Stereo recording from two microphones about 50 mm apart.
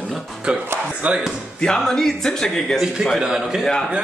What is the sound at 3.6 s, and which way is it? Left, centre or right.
Speech, centre.